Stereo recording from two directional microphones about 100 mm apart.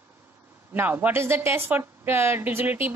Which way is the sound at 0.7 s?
20° right (ahead or behind).